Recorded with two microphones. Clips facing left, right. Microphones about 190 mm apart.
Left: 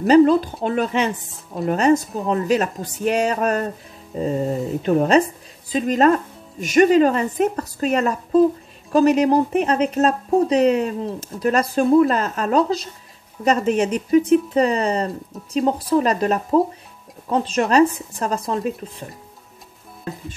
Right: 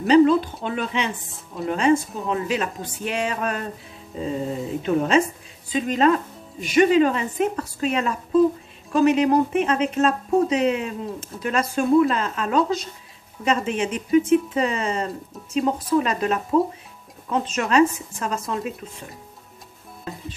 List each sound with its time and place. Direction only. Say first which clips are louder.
0.0 s a woman's voice: left 2 dB; 45° left (ahead or behind)